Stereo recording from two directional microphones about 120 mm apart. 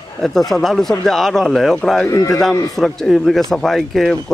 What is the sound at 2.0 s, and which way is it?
Speech, 30° left (ahead or behind).